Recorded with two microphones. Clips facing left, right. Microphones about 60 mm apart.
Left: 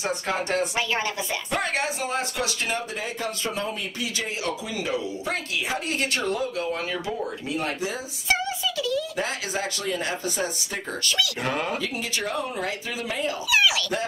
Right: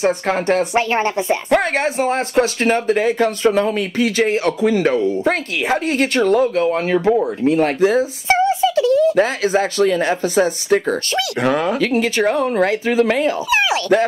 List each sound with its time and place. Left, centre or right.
0.0 s speech: right
3.4 s speech: right
6.2 s speech: right
8.0 s a sound: right
9.1 s speech: right
13.5 s speech: right